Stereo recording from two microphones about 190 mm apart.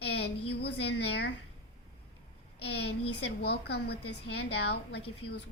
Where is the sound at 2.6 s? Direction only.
60° left (ahead or behind).